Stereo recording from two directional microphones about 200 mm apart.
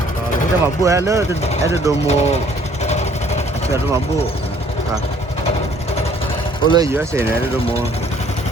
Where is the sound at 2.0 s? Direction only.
35° left (ahead or behind).